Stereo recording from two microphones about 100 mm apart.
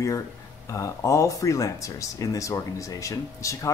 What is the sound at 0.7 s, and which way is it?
Speech, 30° left (ahead or behind).